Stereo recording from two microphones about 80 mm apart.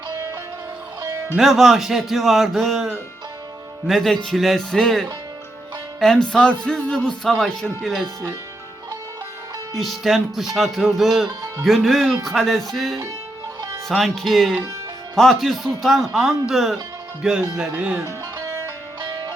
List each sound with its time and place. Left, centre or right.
1.4 s speech: centre
9.7 s speech: centre
18.0 s music: right
19.0 s music: right